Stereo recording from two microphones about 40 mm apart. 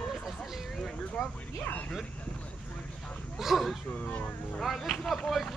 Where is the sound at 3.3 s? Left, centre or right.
Centre.